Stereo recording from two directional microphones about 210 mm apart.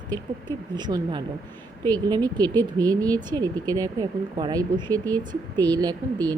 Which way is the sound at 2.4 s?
10° left (ahead or behind).